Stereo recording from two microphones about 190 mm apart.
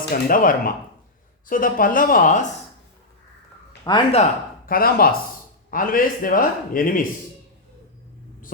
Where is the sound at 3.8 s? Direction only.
30° left (ahead or behind).